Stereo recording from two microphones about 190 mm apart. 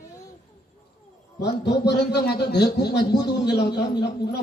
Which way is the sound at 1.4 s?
60° left (ahead or behind).